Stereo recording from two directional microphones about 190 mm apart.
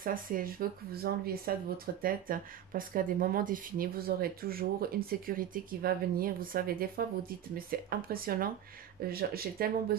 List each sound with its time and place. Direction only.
0.0 s speech: 45° right (ahead or behind)